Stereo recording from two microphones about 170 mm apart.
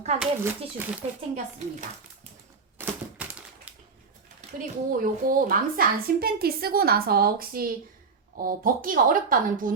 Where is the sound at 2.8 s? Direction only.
10° right (ahead or behind).